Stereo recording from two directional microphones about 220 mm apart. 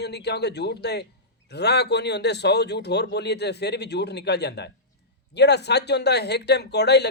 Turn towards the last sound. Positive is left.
turn(degrees=50)  # may be behind; listen again after turning